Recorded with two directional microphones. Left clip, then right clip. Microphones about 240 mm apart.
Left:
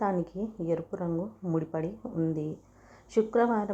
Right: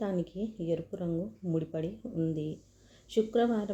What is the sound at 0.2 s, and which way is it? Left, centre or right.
Speech, left.